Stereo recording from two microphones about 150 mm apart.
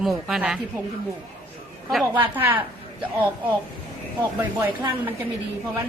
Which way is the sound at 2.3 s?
10° right (ahead or behind).